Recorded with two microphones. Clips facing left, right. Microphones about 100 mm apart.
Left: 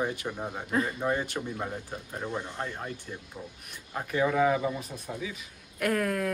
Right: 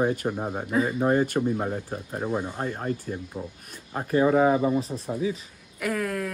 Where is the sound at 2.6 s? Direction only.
45° right (ahead or behind).